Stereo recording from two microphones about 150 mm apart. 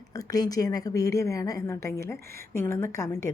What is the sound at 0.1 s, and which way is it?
A woman's voice, 25° left (ahead or behind).